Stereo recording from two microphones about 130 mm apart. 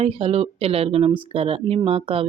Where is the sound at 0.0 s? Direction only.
50° right (ahead or behind).